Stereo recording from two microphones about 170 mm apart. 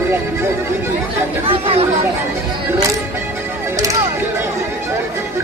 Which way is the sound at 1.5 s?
35° right (ahead or behind).